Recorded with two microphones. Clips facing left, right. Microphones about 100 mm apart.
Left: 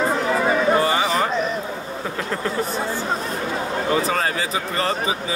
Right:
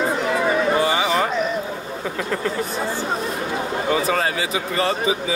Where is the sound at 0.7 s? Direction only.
35° left (ahead or behind).